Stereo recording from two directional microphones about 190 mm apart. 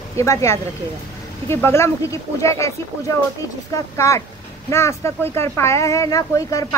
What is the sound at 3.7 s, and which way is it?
Speech, 15° left (ahead or behind).